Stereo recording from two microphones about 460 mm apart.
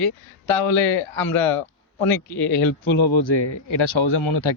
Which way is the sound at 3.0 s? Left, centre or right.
Left.